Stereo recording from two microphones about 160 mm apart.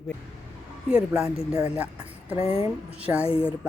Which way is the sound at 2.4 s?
15° right (ahead or behind).